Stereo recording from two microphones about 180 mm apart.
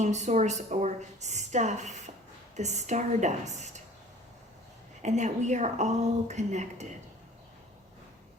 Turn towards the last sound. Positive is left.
turn(degrees=-40)  # may be behind; listen again after turning